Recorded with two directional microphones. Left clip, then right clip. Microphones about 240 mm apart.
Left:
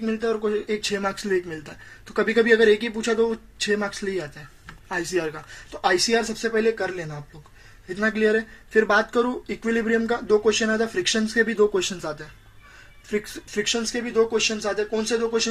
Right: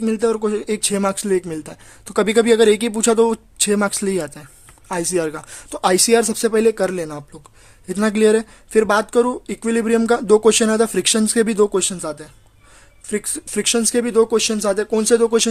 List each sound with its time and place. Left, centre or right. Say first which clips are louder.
0.0 s speech: right 6 dB; right
4.9 s speech: right 5 dB; right
5.8 s speech: right 6 dB; right
8.7 s speech: right 4 dB; right
10.4 s speech: right 7 dB; right
11.5 s speech: right 4 dB; right
13.6 s speech: right 7 dB; right